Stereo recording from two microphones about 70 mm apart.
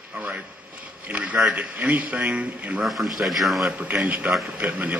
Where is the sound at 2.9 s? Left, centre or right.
Centre.